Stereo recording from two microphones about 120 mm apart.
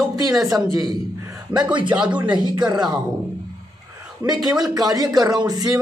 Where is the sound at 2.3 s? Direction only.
35° right (ahead or behind).